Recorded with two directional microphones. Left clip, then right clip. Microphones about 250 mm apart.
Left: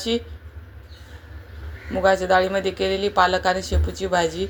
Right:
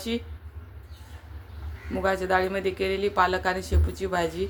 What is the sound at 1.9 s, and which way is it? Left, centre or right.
Speech, centre.